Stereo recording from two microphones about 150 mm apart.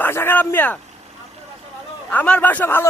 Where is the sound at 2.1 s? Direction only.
10° left (ahead or behind).